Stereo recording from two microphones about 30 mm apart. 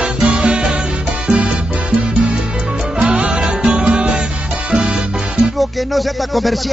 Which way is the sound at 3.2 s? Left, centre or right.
Right.